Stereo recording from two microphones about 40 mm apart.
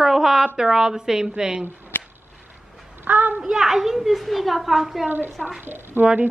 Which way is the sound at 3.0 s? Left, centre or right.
Right.